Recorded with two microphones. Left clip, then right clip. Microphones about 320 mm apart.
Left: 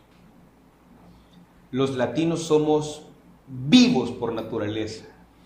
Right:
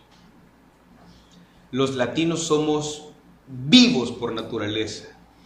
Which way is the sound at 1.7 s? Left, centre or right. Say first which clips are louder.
Right 1 dB; centre.